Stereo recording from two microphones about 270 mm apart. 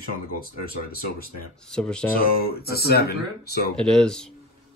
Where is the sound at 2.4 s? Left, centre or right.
Left.